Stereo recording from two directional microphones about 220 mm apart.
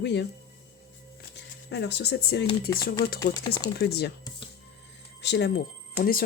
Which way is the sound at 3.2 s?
15° left (ahead or behind).